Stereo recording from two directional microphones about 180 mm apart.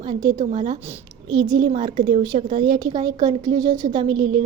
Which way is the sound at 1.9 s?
45° right (ahead or behind).